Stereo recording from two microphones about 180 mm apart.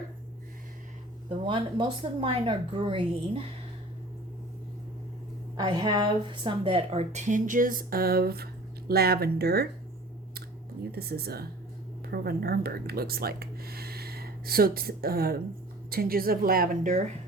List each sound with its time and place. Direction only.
1.3 s speech: 30° right (ahead or behind)
5.5 s a woman's voice: 25° right (ahead or behind); by 9.6 s 60° right (ahead or behind)
10.9 s a woman's voice: 60° right (ahead or behind); by 17.1 s 45° right (ahead or behind)